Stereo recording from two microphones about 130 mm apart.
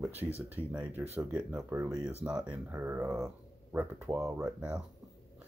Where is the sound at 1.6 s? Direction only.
20° right (ahead or behind).